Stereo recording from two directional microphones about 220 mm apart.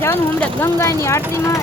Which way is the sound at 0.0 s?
10° left (ahead or behind).